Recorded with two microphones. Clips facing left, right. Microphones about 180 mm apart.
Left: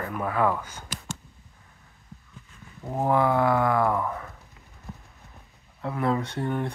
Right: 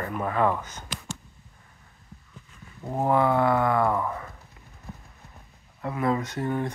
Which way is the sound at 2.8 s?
5° right (ahead or behind).